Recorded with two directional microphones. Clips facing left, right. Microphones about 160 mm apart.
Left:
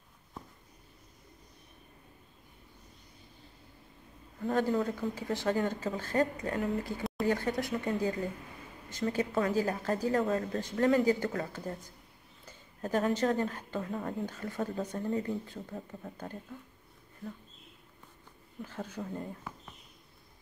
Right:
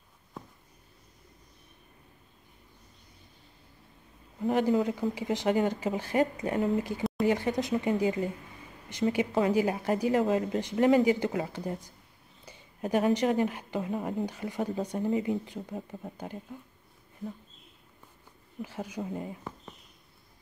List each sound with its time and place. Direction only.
4.5 s speech: 15° right (ahead or behind)
18.6 s speech: 10° right (ahead or behind)